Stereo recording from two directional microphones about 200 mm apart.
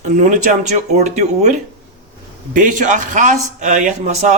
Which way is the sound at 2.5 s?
40° right (ahead or behind).